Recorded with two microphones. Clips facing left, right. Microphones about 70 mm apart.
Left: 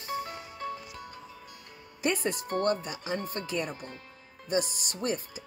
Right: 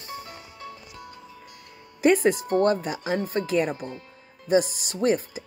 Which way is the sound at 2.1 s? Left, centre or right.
Right.